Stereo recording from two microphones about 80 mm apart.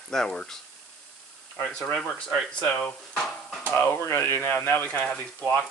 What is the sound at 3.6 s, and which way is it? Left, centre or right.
Speech, left.